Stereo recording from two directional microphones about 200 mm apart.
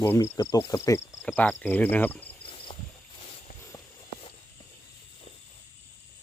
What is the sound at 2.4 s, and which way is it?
Cricket, 25° left (ahead or behind).